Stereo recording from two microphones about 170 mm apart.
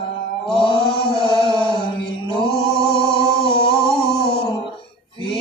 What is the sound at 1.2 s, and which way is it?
Chant, 30° left (ahead or behind).